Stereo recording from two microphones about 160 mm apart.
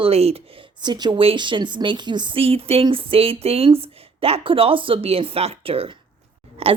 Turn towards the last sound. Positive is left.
turn(degrees=-40)  # may be behind; listen again after turning